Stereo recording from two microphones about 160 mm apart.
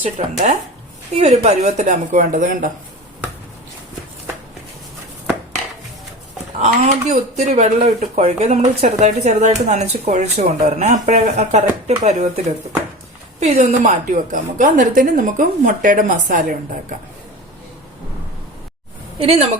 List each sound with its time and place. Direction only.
0.0 s speech: 45° right (ahead or behind)
6.6 s speech: 45° right (ahead or behind)
13.4 s speech: 45° right (ahead or behind)
19.2 s a woman's voice: 40° right (ahead or behind)